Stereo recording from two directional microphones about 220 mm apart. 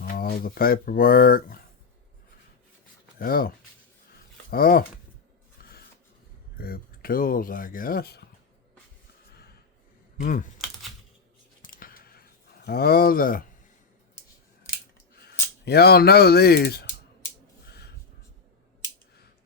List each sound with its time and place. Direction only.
0.0 s speech: 40° left (ahead or behind)
3.2 s speech: 40° left (ahead or behind)
4.5 s speech: 40° left (ahead or behind)
5.6 s filing: 45° left (ahead or behind)
6.6 s speech: 40° left (ahead or behind)
10.2 s speech: 35° left (ahead or behind)
11.6 s a sound: 40° left (ahead or behind)
12.6 s speech: 45° left (ahead or behind)
15.6 s speech: 45° left (ahead or behind)
17.7 s a sound: 45° left (ahead or behind)